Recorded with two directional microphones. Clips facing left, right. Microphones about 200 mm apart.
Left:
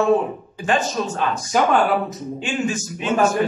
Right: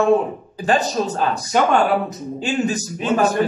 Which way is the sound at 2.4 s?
35° right (ahead or behind).